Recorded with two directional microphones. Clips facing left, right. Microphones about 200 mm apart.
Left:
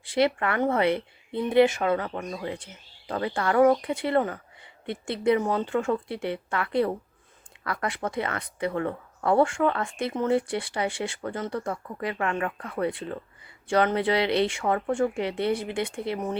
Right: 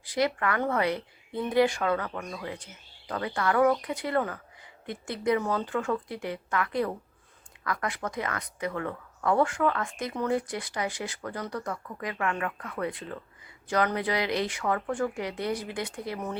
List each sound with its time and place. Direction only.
0.0 s speech: 25° left (ahead or behind)